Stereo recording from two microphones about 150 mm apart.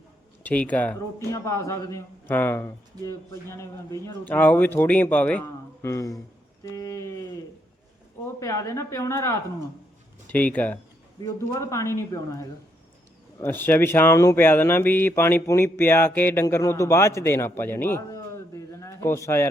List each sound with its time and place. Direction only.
0.4 s speech: 10° left (ahead or behind)
6.7 s a sound: 20° left (ahead or behind)
8.4 s speech: 20° left (ahead or behind)
13.4 s speech: 15° left (ahead or behind)